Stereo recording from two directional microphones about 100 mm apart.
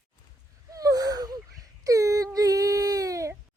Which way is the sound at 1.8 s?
35° right (ahead or behind).